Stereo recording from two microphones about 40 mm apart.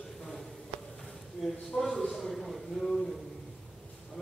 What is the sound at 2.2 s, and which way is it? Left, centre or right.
Speech, centre.